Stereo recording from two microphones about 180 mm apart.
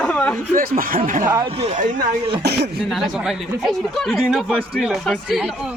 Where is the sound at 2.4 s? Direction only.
65° right (ahead or behind).